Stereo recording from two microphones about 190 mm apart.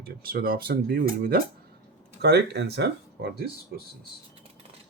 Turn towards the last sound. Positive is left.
turn(degrees=-60)  # may be behind; listen again after turning